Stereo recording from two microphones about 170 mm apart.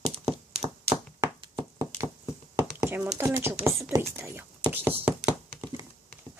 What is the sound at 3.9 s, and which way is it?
Whispering, 15° right (ahead or behind).